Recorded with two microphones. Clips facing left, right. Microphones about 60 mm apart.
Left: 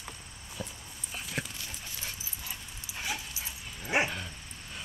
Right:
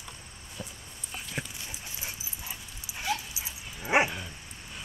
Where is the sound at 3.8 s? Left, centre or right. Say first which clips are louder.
Right 4 dB; right.